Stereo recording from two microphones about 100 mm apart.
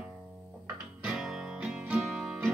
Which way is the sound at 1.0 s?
5° right (ahead or behind).